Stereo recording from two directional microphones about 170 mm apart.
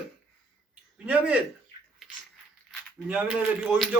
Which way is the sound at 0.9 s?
10° right (ahead or behind).